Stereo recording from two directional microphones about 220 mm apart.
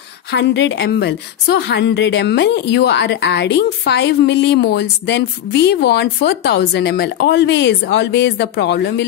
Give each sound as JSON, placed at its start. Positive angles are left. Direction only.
{"t": 0.3, "sound": "a woman's voice", "side_deg": 55}